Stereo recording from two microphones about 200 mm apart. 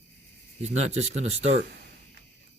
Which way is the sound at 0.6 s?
35° right (ahead or behind).